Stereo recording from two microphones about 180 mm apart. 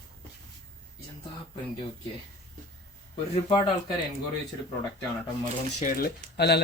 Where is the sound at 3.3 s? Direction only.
25° left (ahead or behind).